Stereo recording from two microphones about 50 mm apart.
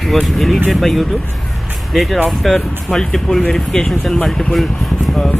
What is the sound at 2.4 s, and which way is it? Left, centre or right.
Speech, centre.